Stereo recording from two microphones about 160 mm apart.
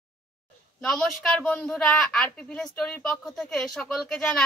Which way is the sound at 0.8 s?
5° left (ahead or behind).